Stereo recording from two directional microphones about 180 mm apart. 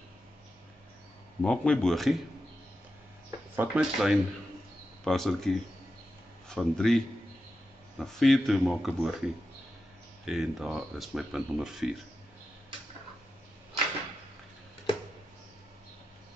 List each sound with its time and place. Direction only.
1.4 s speech: 5° left (ahead or behind)
3.5 s speech: 5° right (ahead or behind)
6.5 s speech: 5° left (ahead or behind)
8.0 s speech: centre (ahead or behind)
10.2 s speech: centre (ahead or behind)